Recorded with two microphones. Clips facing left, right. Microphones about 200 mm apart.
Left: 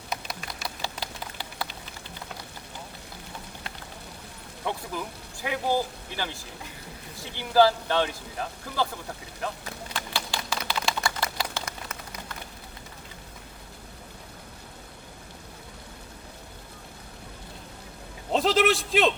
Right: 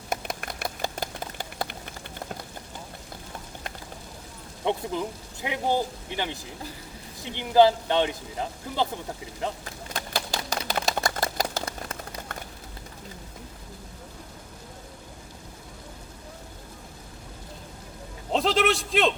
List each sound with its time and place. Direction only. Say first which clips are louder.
0.1 s a sound: right 4 dB; 50° right (ahead or behind)
4.6 s speech: right 5 dB; 20° right (ahead or behind)
9.9 s typewriter: right 3 dB; 45° right (ahead or behind)
18.3 s a man's voice: left 1 dB; centre (ahead or behind)